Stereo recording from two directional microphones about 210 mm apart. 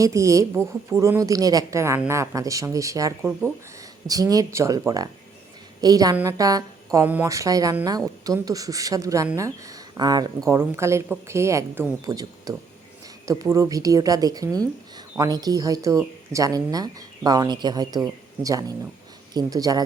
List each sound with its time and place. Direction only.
0.0 s speech: 15° right (ahead or behind)
5.8 s speech: 15° right (ahead or behind)
19.3 s speech: 20° right (ahead or behind)